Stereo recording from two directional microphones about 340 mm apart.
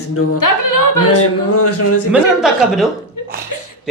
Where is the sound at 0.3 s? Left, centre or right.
Left.